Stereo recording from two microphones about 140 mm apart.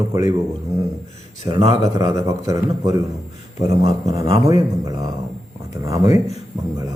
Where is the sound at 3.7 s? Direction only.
45° right (ahead or behind).